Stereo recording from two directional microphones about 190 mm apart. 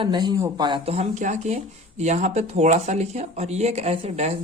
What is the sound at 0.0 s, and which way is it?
Speech, 20° right (ahead or behind).